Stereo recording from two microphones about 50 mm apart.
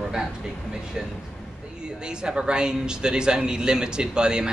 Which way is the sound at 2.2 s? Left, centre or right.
Centre.